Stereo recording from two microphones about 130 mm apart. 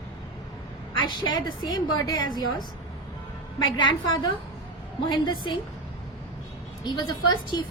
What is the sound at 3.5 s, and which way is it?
A woman's voice, 35° left (ahead or behind).